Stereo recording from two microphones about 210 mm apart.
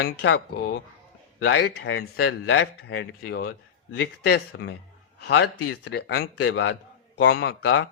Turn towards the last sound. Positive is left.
turn(degrees=60)  # may be behind; listen again after turning